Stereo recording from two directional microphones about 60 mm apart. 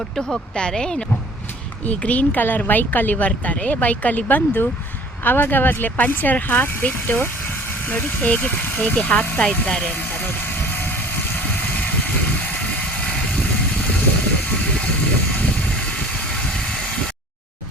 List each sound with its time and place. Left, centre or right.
0.2 s speech: centre
1.8 s speech: left
9.9 s vehicle: left
15.4 s vehicle: left